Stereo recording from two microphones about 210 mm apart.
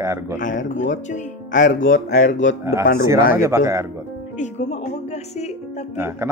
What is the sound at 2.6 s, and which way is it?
Speech, 10° right (ahead or behind).